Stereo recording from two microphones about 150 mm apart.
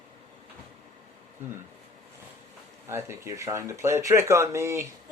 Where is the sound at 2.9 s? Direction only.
20° right (ahead or behind).